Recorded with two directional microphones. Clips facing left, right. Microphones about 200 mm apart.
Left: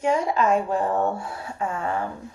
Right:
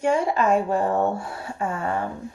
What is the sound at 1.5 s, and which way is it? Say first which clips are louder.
Speech: right 1 dB; 30° right (ahead or behind).